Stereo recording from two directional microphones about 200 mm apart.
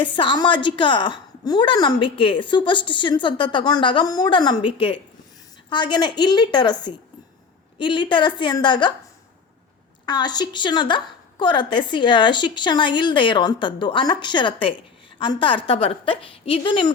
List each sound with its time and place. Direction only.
0.0 s a woman's voice: 25° left (ahead or behind)
10.1 s a woman's voice: 20° left (ahead or behind)